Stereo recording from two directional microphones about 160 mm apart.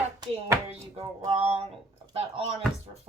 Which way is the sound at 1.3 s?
40° right (ahead or behind).